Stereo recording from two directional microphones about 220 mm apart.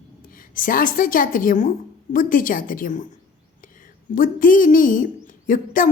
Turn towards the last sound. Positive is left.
turn(degrees=40)  # may be behind; listen again after turning